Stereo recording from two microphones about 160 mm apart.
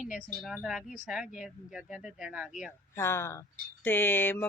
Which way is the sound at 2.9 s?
15° left (ahead or behind).